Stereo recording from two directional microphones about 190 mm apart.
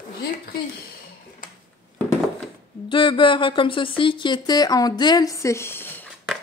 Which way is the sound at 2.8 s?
25° left (ahead or behind).